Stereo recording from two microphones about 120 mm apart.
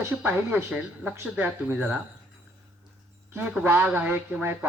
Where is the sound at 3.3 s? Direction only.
15° right (ahead or behind).